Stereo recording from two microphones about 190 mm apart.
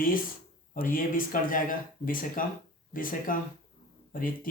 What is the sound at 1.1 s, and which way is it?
Speech, 45° left (ahead or behind).